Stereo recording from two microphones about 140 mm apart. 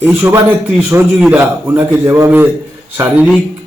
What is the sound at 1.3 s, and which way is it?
A man's voice, 20° right (ahead or behind).